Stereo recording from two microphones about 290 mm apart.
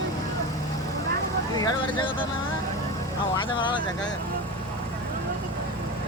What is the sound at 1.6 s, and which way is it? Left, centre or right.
Speech, centre.